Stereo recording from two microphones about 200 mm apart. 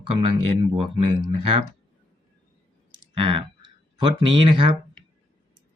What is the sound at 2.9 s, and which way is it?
Clicking, 25° right (ahead or behind).